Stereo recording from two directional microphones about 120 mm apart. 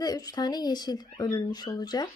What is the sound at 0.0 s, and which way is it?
A woman's voice, 35° left (ahead or behind).